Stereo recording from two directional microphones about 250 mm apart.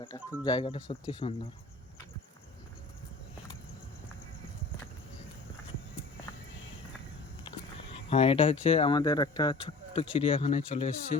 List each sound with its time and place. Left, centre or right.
0.4 s speech: centre
7.5 s a sound: centre
7.9 s speech: left